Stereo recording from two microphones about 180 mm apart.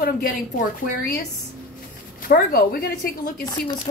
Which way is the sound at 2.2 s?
55° left (ahead or behind).